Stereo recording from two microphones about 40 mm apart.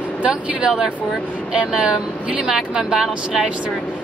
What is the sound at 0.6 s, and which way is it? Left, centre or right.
Speech, centre.